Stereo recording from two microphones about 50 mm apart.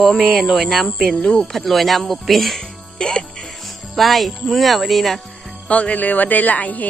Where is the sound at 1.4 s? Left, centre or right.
Centre.